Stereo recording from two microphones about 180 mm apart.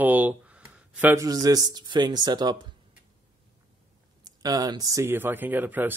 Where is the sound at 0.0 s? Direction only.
10° right (ahead or behind).